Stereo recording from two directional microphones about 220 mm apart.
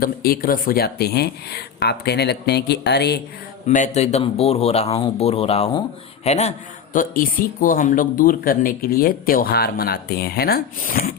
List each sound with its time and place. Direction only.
0.0 s speech: 45° left (ahead or behind)
3.7 s speech: 30° left (ahead or behind)